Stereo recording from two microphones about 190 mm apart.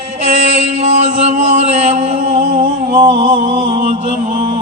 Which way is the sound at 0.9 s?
35° right (ahead or behind).